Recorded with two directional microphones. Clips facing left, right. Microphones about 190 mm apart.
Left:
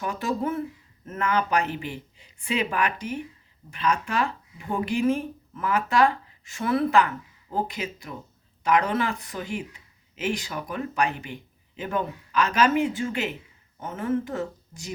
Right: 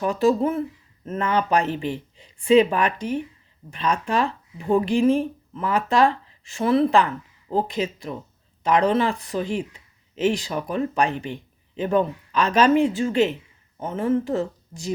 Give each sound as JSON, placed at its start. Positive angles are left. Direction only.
{"t": 0.0, "sound": "speech", "side_deg": -30}